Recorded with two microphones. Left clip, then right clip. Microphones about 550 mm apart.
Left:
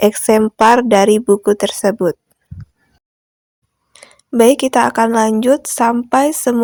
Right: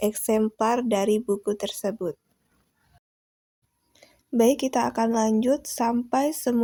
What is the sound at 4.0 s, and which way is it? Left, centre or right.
Speech, right.